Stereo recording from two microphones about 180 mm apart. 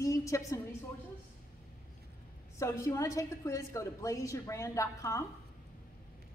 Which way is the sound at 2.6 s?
15° left (ahead or behind).